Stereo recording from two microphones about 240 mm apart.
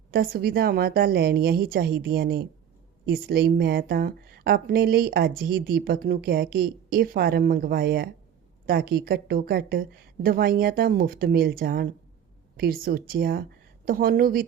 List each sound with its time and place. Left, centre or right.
0.1 s speech: right